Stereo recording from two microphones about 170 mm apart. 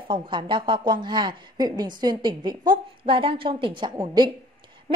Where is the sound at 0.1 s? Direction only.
30° right (ahead or behind).